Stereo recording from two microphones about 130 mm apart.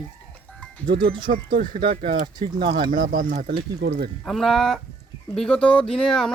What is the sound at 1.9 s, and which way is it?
Speech, 90° right.